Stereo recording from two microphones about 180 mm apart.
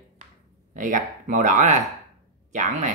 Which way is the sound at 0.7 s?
45° right (ahead or behind).